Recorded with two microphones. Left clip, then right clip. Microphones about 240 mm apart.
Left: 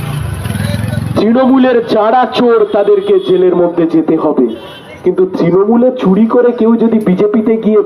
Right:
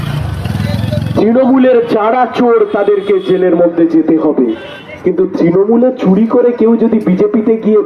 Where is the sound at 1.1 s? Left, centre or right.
Left.